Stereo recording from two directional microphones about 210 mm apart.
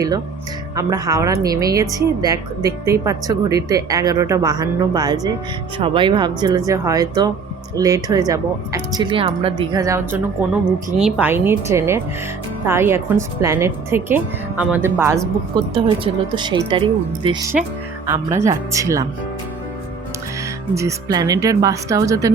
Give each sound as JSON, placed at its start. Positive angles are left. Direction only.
{"t": 0.8, "sound": "a woman's voice", "side_deg": -15}
{"t": 18.0, "sound": "a woman's voice", "side_deg": -10}
{"t": 20.7, "sound": "a woman's voice", "side_deg": -15}